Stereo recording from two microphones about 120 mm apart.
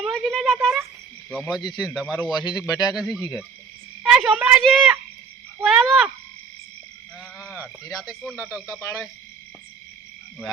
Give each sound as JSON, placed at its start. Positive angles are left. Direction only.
{"t": 0.0, "sound": "a sound", "side_deg": 5}
{"t": 1.3, "sound": "speech", "side_deg": -5}
{"t": 2.3, "sound": "a man's voice", "side_deg": 35}
{"t": 2.9, "sound": "a woman's voice", "side_deg": -5}
{"t": 7.5, "sound": "a woman's voice", "side_deg": -10}